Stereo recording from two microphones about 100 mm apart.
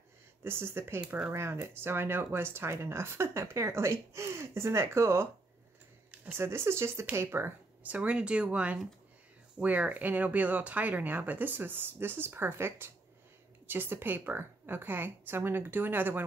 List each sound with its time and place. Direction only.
0.4 s speech: 20° right (ahead or behind)
6.1 s a sound: 15° right (ahead or behind)
6.4 s speech: 25° right (ahead or behind)